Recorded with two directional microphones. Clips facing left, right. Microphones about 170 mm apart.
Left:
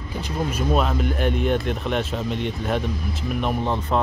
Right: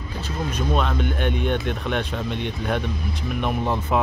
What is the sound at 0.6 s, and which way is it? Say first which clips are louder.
Speech: left 1 dB; 5° left (ahead or behind).